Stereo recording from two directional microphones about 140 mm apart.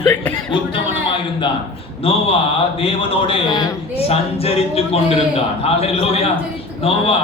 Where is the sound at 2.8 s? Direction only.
40° left (ahead or behind).